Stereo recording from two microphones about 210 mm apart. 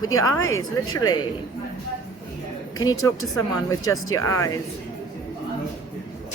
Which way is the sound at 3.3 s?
15° left (ahead or behind).